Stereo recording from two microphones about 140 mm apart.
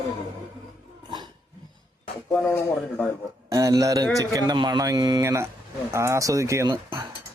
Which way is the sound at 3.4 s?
25° right (ahead or behind).